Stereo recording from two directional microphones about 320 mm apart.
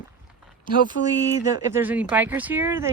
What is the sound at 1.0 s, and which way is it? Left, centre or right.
Speech, left.